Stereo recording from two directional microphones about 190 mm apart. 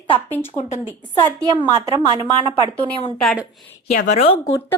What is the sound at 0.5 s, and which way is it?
Speech, 40° left (ahead or behind).